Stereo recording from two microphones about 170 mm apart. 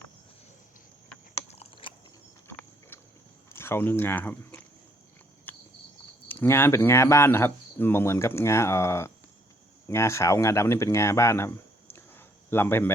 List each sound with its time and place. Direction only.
1.5 s biting: 35° left (ahead or behind)
3.5 s speech: 15° left (ahead or behind)
5.5 s cricket: 10° left (ahead or behind)
6.2 s speech: 10° left (ahead or behind)